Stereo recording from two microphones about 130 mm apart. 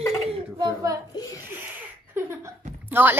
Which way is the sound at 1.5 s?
15° right (ahead or behind).